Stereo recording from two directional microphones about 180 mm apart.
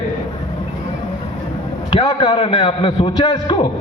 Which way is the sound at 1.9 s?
30° left (ahead or behind).